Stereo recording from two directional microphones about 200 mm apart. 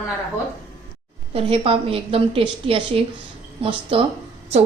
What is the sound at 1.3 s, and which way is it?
A woman's voice, 30° right (ahead or behind).